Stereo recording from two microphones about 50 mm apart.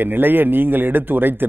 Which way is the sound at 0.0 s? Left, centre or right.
Right.